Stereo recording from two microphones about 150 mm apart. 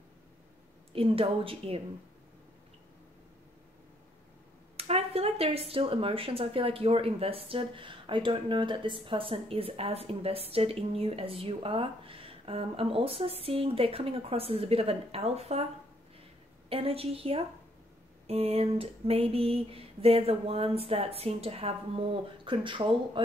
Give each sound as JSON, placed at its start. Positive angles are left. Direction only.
{"t": 0.9, "sound": "speech", "side_deg": -40}
{"t": 4.7, "sound": "speech", "side_deg": -40}
{"t": 16.6, "sound": "speech", "side_deg": -40}